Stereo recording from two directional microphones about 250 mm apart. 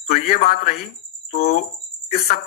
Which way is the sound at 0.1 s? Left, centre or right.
Left.